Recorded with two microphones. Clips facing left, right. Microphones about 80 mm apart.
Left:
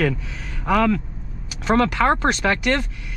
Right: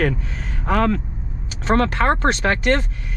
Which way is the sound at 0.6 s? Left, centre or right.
Right.